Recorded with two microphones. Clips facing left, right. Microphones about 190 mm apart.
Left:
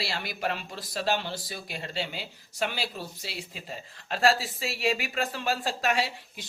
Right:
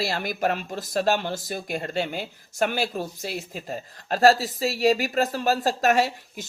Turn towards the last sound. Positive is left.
turn(degrees=-45)  # may be behind; listen again after turning